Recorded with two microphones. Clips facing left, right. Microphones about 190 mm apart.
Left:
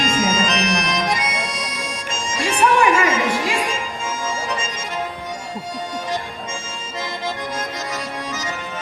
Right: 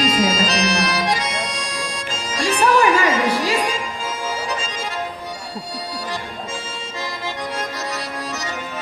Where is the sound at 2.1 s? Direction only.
35° right (ahead or behind).